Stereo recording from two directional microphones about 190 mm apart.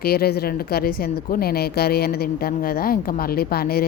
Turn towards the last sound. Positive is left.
turn(degrees=55)  # may be behind; listen again after turning